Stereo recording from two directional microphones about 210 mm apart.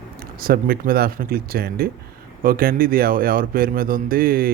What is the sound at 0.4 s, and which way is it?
Speech, 45° right (ahead or behind).